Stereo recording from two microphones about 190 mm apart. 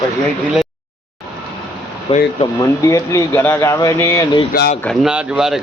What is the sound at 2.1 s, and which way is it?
Speech, 30° left (ahead or behind).